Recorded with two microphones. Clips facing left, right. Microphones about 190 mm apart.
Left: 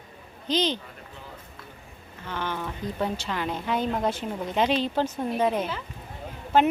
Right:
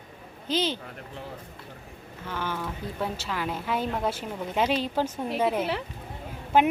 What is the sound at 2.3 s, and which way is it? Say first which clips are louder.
Speech: left 1 dB; 5° right (ahead or behind).